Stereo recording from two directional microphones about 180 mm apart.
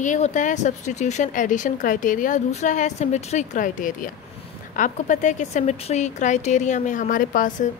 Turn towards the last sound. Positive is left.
turn(degrees=50)  # may be behind; listen again after turning